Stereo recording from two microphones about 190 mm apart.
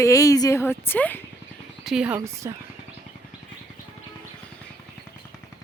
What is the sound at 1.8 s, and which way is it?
Speech, 5° right (ahead or behind).